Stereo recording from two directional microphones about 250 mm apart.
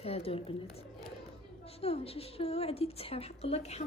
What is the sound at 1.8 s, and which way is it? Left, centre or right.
A woman's voice, left.